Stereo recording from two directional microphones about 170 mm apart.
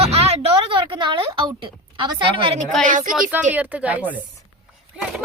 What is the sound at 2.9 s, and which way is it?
Speech, 50° right (ahead or behind).